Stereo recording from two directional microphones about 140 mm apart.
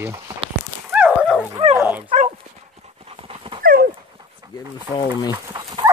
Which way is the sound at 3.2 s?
40° right (ahead or behind).